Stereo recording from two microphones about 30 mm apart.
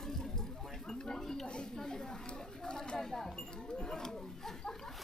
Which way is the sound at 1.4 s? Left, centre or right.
Left.